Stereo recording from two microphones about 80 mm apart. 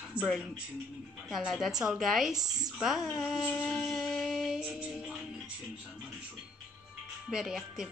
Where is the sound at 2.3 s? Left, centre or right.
Right.